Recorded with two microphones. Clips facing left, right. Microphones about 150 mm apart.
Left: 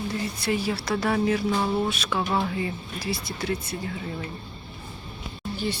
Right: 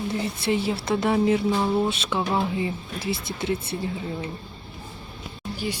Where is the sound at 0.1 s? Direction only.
25° right (ahead or behind).